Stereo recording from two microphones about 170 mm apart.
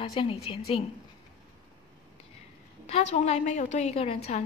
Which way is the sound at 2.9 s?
45° left (ahead or behind).